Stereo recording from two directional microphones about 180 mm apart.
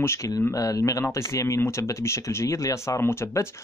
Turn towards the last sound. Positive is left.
turn(degrees=15)  # may be behind; listen again after turning